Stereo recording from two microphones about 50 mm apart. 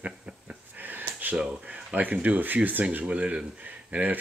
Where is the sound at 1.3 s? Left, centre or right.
Centre.